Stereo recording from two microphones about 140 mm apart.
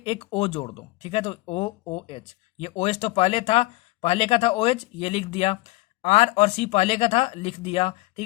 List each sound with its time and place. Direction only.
0.0 s speech: 45° left (ahead or behind)